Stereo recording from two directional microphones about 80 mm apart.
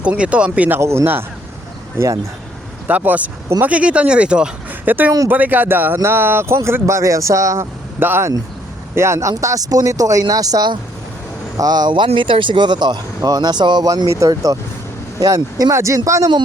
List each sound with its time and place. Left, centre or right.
0.0 s speech: centre
0.8 s speech: right
2.8 s speech: right
4.9 s speech: right
9.3 s speech: right
13.8 s speech: right